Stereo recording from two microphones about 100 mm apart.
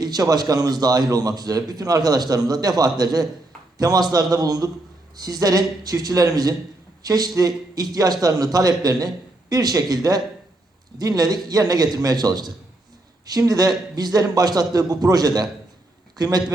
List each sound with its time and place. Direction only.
0.0 s a man's voice: 40° right (ahead or behind)